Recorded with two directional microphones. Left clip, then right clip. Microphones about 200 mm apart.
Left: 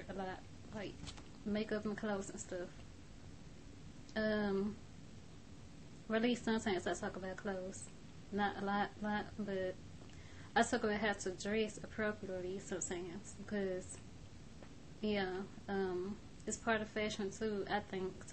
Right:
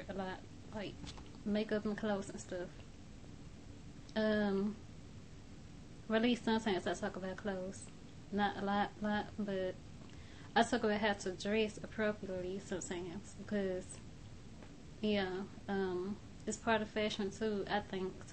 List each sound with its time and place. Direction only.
0.1 s speech: 5° left (ahead or behind)
4.1 s a woman's voice: 5° left (ahead or behind)
6.0 s a woman's voice: 5° left (ahead or behind)
15.0 s a woman's voice: 5° left (ahead or behind)